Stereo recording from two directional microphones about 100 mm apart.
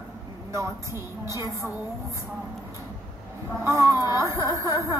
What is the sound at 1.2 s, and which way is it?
Speech, 30° right (ahead or behind).